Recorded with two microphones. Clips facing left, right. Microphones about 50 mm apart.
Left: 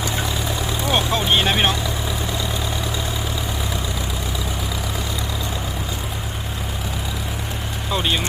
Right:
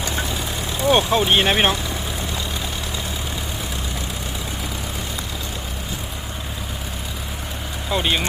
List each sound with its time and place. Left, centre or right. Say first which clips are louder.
0.9 s speech: right 4 dB; centre
7.9 s speech: right 1 dB; centre